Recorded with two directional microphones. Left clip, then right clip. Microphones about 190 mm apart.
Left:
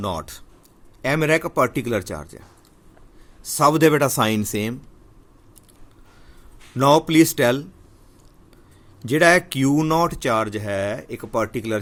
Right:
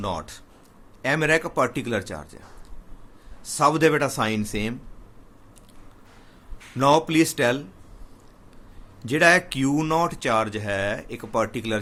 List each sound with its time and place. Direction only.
0.0 s speech: 40° left (ahead or behind)
3.4 s speech: 40° left (ahead or behind)
6.7 s speech: 40° left (ahead or behind)
9.0 s speech: 40° left (ahead or behind)